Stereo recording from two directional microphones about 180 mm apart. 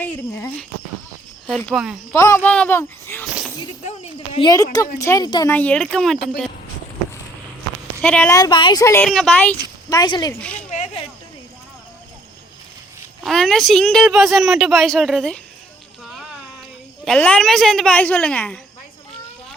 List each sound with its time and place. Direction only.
0.0 s a woman's voice: 10° left (ahead or behind)
2.1 s speech: 15° left (ahead or behind)
3.8 s a sound: 35° left (ahead or behind); by 4.9 s 20° left (ahead or behind)
4.9 s speech: 20° left (ahead or behind)
5.5 s a woman's voice: 10° left (ahead or behind)
8.0 s speech: 10° left (ahead or behind)
8.4 s speech: 25° left (ahead or behind)
9.0 s a woman's voice: centre (ahead or behind)
9.9 s speech: 20° left (ahead or behind)
10.4 s speech: 5° left (ahead or behind)
13.2 s a woman's voice: centre (ahead or behind)
17.1 s a woman's voice: 5° left (ahead or behind)